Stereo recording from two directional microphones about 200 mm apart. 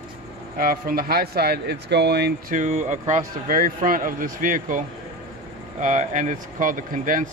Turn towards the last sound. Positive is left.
turn(degrees=-40)  # may be behind; listen again after turning